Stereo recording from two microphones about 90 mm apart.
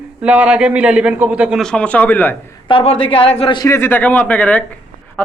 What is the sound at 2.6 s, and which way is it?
Speech, 85° left.